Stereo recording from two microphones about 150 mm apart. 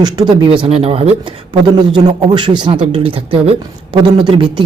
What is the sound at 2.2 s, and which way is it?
A man's voice, 30° right (ahead or behind).